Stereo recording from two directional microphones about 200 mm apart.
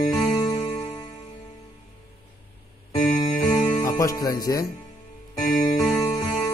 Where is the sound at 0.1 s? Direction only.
20° left (ahead or behind).